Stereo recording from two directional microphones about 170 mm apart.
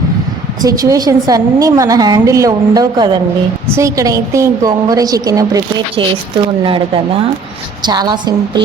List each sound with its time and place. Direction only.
0.6 s a woman's voice: 20° right (ahead or behind)